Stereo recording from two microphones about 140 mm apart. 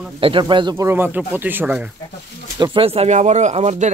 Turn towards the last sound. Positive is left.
turn(degrees=-55)  # may be behind; listen again after turning